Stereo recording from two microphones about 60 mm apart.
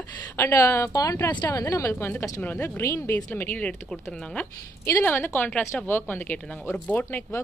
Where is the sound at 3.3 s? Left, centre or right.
Left.